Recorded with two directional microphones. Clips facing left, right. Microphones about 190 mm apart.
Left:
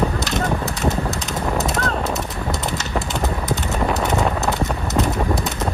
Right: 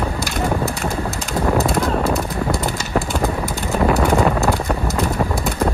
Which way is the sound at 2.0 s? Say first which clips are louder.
Right 4 dB; 20° left (ahead or behind).